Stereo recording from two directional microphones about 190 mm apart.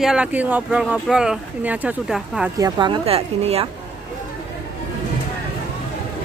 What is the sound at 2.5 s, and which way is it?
A woman's voice, 20° right (ahead or behind).